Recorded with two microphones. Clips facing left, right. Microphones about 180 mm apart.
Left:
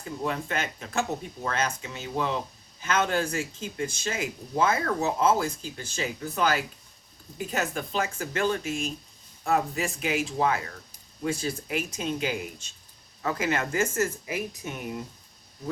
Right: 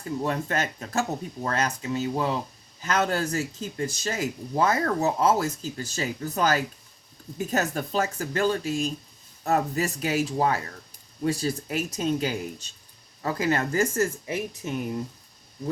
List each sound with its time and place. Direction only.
0.3 s speech: 40° right (ahead or behind)